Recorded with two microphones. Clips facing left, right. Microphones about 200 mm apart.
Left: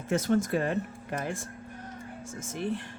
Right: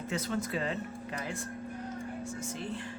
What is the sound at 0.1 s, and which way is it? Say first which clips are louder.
Speech: left 8 dB; 50° left (ahead or behind).